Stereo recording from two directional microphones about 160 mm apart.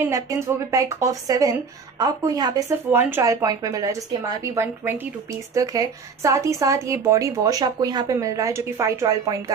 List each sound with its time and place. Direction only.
0.1 s a woman's voice: 20° right (ahead or behind)
2.8 s a woman's voice: 15° right (ahead or behind)